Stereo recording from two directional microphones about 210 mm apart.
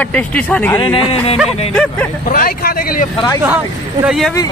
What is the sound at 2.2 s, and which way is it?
Speech, 45° left (ahead or behind).